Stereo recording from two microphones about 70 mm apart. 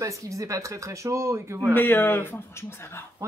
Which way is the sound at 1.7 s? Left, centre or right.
Left.